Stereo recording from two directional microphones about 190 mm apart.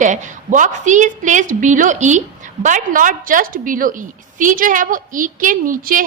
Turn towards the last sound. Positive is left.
turn(degrees=-45)  # may be behind; listen again after turning